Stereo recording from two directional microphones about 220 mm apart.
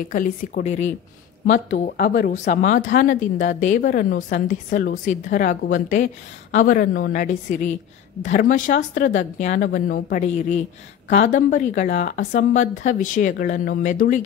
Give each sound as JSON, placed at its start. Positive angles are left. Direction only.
{"t": 0.1, "sound": "speech", "side_deg": 35}
{"t": 1.5, "sound": "speech", "side_deg": 40}